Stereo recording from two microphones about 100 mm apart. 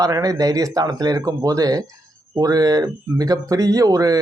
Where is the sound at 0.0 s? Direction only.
35° right (ahead or behind).